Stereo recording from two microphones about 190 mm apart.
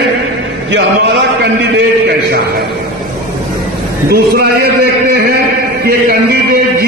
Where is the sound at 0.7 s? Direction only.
65° right (ahead or behind).